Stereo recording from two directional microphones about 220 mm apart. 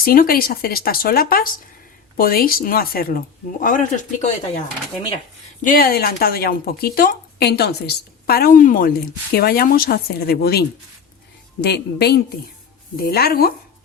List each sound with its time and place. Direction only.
0.0 s a woman's voice: 40° left (ahead or behind)
5.6 s a woman's voice: 40° left (ahead or behind)